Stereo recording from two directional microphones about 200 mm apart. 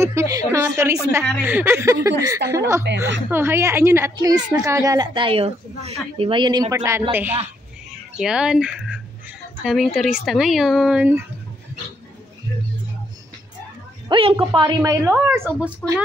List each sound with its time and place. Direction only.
0.0 s a sound: 15° right (ahead or behind)
1.4 s a woman's voice: 10° right (ahead or behind)
2.9 s a woman's voice: 60° right (ahead or behind)
3.3 s a woman's voice: 10° right (ahead or behind)
14.0 s a woman's voice: 25° right (ahead or behind)